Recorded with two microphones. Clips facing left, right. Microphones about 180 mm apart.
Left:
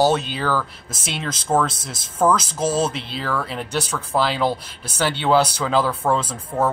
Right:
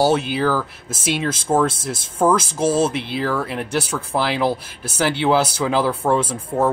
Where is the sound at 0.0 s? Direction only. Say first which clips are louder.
Right 2 dB; 10° right (ahead or behind).